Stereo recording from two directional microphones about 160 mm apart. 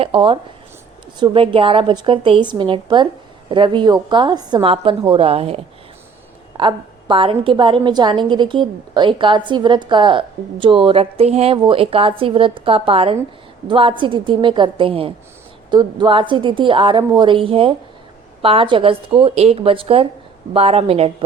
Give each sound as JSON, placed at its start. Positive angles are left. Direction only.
{"t": 0.0, "sound": "a woman's voice", "side_deg": -30}
{"t": 6.6, "sound": "a woman's voice", "side_deg": -30}